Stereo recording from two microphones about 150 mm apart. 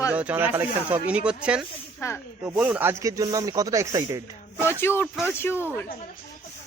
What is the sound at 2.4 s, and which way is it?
Speech, 10° right (ahead or behind).